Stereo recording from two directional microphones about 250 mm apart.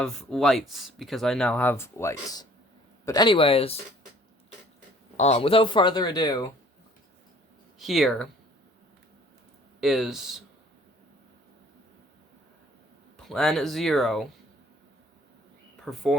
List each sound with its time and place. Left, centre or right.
0.0 s speech: centre; by 3.8 s left
5.1 s speech: left
7.8 s speech: centre
9.8 s speech: centre
13.1 s speech: centre
15.8 s speech: centre